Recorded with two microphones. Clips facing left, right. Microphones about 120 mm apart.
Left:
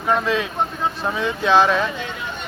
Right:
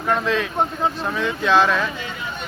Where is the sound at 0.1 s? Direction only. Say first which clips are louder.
Left 1 dB; 10° left (ahead or behind).